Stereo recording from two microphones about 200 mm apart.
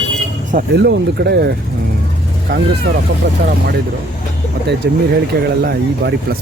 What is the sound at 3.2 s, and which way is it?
Speech, 65° right (ahead or behind).